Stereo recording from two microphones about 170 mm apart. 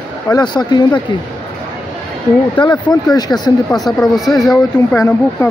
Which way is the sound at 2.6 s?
30° left (ahead or behind).